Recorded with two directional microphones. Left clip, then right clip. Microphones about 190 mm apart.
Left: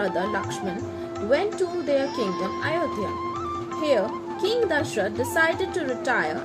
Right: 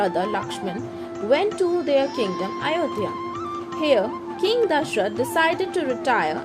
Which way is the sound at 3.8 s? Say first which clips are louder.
Right 3 dB; 40° right (ahead or behind).